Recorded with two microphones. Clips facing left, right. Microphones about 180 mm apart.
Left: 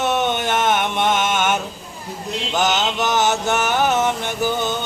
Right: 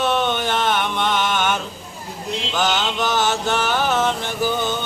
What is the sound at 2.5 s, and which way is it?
Mantra, 20° left (ahead or behind).